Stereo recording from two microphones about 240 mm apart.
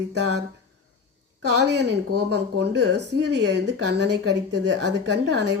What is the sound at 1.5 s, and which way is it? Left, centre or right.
A woman's voice, right.